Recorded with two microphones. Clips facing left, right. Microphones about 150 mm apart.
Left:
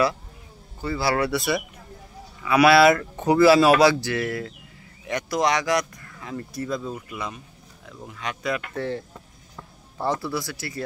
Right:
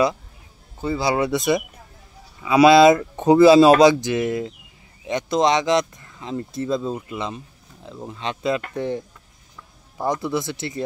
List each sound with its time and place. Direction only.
0.7 s speech: 20° right (ahead or behind)